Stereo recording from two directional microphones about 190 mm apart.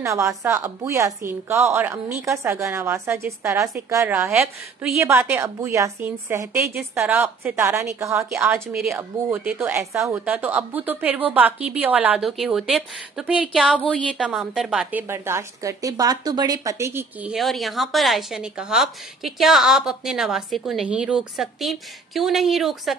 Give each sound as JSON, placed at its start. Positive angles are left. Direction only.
{"t": 0.0, "sound": "a woman's voice", "side_deg": -15}